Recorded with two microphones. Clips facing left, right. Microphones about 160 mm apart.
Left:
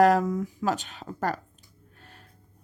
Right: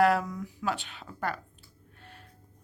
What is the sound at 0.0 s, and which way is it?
A woman's voice, 40° left (ahead or behind).